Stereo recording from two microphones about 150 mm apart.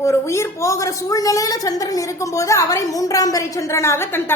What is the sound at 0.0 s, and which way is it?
A woman's voice, 20° left (ahead or behind).